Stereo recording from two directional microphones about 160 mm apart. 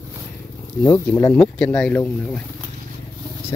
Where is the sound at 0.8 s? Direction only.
20° left (ahead or behind).